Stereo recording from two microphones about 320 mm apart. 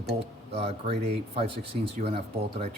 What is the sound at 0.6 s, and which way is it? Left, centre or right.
Speech, centre.